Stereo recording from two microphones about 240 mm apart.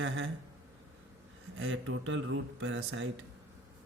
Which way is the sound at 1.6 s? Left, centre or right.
Right.